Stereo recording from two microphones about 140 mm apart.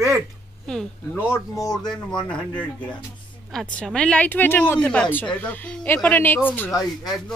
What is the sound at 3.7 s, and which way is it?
Speech, 5° left (ahead or behind).